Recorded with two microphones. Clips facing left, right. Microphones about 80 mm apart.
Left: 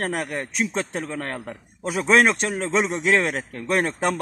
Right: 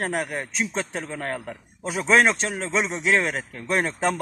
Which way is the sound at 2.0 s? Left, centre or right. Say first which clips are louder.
Left 1 dB; left.